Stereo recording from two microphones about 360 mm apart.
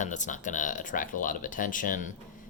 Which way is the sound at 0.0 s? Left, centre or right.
Left.